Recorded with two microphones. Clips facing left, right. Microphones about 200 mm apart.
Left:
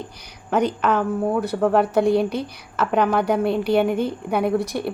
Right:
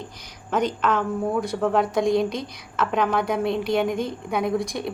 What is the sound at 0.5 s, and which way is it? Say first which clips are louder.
A woman's voice: left 3 dB; 10° left (ahead or behind).